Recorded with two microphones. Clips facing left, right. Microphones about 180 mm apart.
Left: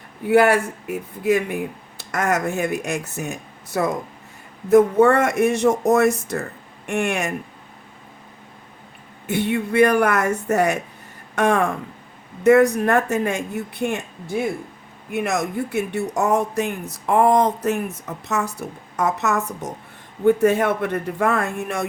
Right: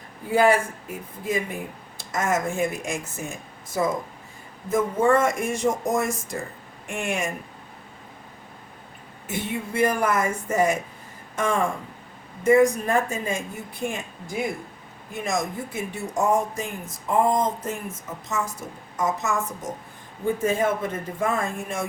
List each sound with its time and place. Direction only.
0.3 s speech: 70° left (ahead or behind)
9.2 s speech: 70° left (ahead or behind)
15.1 s speech: 65° left (ahead or behind)